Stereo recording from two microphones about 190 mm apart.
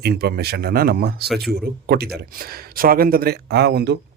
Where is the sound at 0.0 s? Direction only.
55° right (ahead or behind).